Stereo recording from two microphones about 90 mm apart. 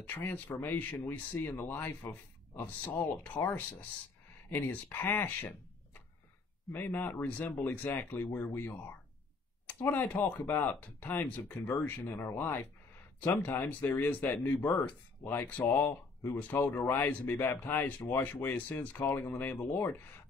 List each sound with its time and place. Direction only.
0.0 s speech: 20° left (ahead or behind)
6.8 s speech: 20° left (ahead or behind)